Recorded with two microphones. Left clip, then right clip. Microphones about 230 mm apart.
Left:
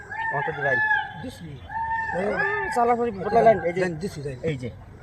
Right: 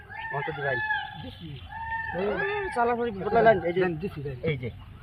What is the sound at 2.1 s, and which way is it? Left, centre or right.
Speech, centre.